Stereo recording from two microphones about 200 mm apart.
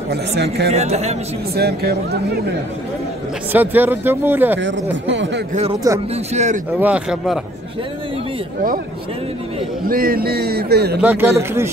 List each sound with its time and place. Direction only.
0.1 s speech: 55° right (ahead or behind)
0.7 s a man's voice: 35° right (ahead or behind)
1.5 s speech: 50° right (ahead or behind)
3.5 s speech: 10° right (ahead or behind)
5.0 s speech: 65° right (ahead or behind)
5.5 s a man's voice: 30° right (ahead or behind)
6.8 s speech: 5° right (ahead or behind)
9.8 s speech: 45° right (ahead or behind)
11.0 s speech: 10° right (ahead or behind)